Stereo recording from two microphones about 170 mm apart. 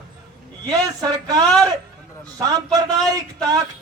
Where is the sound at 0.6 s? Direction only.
20° right (ahead or behind).